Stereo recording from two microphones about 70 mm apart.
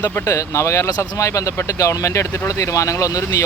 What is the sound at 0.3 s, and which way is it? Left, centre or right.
Speech, left.